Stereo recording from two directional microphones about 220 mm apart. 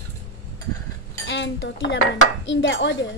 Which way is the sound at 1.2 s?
55° left (ahead or behind).